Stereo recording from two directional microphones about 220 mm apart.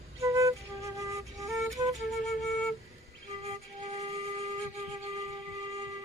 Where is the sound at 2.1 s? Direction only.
Centre (ahead or behind).